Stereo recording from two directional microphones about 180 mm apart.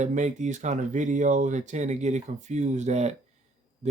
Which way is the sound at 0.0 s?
45° right (ahead or behind).